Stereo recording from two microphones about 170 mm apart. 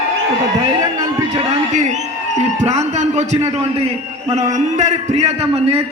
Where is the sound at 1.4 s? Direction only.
45° right (ahead or behind).